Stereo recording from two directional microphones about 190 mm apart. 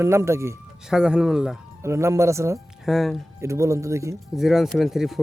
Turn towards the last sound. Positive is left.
turn(degrees=0)  # may be behind; listen again after turning